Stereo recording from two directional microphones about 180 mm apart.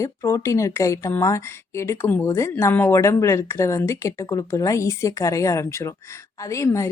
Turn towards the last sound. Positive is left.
turn(degrees=15)  # may be behind; listen again after turning